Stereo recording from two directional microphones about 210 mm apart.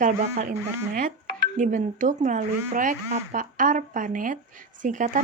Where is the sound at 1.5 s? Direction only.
35° right (ahead or behind).